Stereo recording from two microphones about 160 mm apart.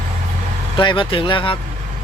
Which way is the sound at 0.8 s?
30° left (ahead or behind).